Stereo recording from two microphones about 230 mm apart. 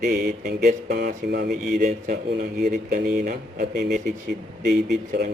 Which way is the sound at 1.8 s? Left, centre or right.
Right.